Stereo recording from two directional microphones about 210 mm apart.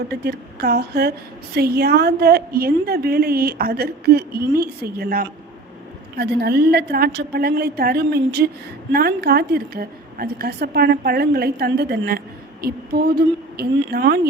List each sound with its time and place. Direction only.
0.1 s a woman's voice: 50° right (ahead or behind)